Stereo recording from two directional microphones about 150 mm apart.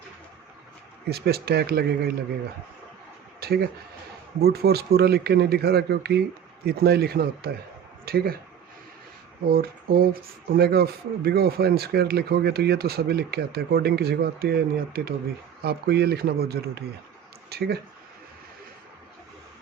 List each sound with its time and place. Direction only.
1.1 s speech: 90° right
3.4 s a man's voice: 90° right
9.5 s a sound: 85° right
10.5 s speech: 90° right